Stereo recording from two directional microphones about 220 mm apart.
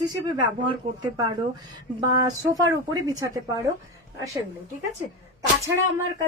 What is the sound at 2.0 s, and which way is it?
A woman's voice, 20° right (ahead or behind).